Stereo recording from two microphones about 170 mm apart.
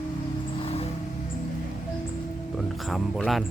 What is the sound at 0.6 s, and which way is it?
Music, 35° left (ahead or behind).